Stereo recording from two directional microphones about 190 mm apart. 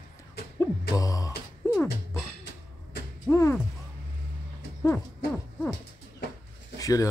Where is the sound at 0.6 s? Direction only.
15° left (ahead or behind).